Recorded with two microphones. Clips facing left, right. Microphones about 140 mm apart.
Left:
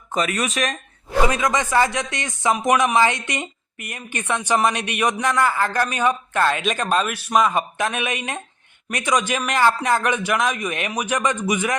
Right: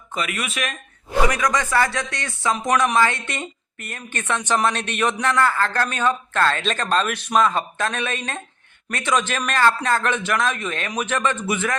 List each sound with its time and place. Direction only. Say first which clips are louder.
0.1 s speech: left 5 dB; 40° left (ahead or behind)
1.3 s speech: left 1 dB; 25° left (ahead or behind)